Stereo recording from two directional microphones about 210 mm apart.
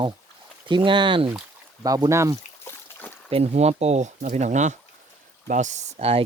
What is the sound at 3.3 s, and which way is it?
Speech, 30° right (ahead or behind).